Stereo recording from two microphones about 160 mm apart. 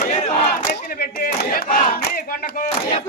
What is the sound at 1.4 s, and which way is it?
Battle cry, 65° left (ahead or behind).